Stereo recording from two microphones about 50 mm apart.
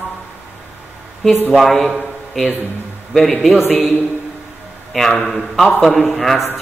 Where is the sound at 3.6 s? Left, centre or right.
Left.